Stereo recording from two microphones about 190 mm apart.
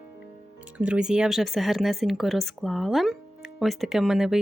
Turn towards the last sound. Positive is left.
turn(degrees=0)  # may be behind; listen again after turning